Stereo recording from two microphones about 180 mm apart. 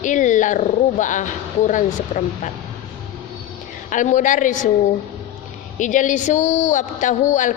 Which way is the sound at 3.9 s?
45° left (ahead or behind).